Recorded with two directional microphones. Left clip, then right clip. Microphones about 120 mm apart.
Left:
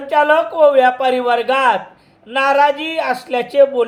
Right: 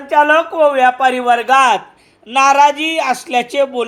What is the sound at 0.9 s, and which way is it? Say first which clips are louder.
Speech: right 2 dB; 35° right (ahead or behind).